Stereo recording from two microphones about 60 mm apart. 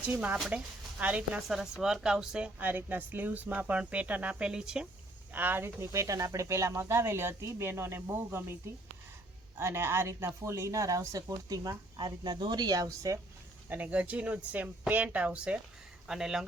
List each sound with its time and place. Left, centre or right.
0.0 s speech: right
1.5 s speech: centre
2.6 s speech: right; by 4.9 s centre
5.3 s speech: right
5.9 s speech: right
9.6 s speech: right
13.7 s speech: right
16.0 s speech: centre